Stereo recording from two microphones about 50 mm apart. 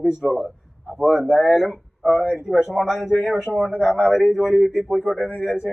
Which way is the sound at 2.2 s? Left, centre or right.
Centre.